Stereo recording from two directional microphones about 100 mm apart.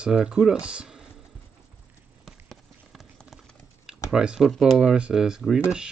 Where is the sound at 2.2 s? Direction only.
Centre (ahead or behind).